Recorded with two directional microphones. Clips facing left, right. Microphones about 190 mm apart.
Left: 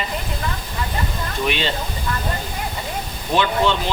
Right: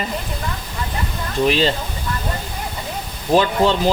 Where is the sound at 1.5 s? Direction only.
35° right (ahead or behind).